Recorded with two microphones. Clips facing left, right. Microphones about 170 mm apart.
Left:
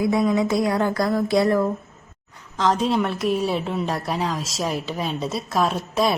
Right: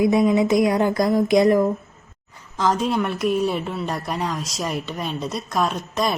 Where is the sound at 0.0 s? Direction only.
15° right (ahead or behind).